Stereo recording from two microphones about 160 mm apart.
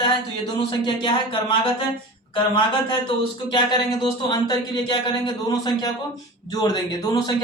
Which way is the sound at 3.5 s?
25° left (ahead or behind).